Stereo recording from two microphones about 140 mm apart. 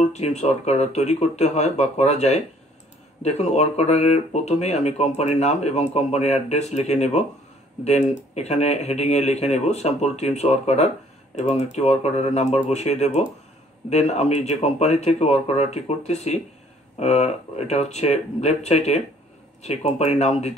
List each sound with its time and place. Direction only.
0.0 s speech: 55° left (ahead or behind)